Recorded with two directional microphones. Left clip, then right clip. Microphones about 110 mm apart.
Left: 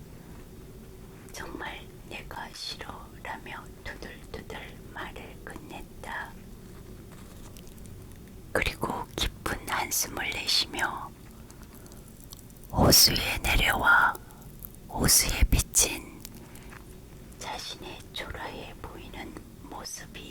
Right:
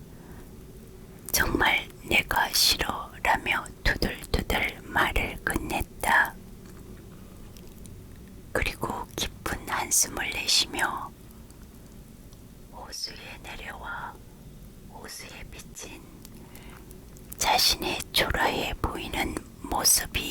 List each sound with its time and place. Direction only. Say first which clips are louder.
1.3 s whispering: right 15 dB; 30° right (ahead or behind)
8.5 s whispering: even; centre (ahead or behind)
12.7 s speech: left 17 dB; 30° left (ahead or behind)
17.3 s speech: right 15 dB; 25° right (ahead or behind)